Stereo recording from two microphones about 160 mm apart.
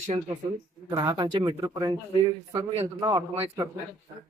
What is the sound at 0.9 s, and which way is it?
Speech, 30° right (ahead or behind).